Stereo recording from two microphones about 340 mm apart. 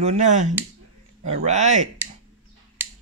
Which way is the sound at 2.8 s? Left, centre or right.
Centre.